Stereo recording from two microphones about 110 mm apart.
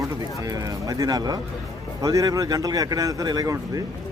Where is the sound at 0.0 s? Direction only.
30° right (ahead or behind).